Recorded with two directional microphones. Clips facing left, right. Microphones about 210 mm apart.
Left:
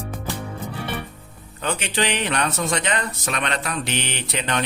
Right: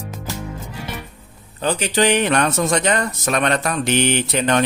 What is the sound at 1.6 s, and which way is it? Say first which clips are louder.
Speech: right 6 dB; 35° right (ahead or behind).